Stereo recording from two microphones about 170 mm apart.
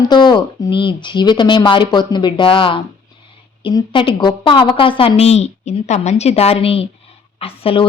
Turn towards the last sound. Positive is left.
turn(degrees=35)  # may be behind; listen again after turning